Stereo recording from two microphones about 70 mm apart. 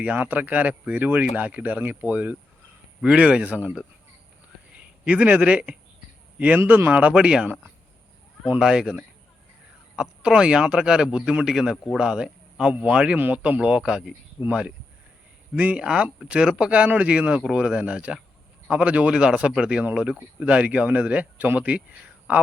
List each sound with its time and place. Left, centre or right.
0.0 s speech: right
6.6 s speech: right
8.5 s speech: centre
13.1 s speech: right
13.4 s speech: centre